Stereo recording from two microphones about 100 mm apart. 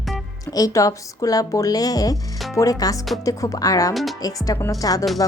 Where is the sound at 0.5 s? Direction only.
35° left (ahead or behind).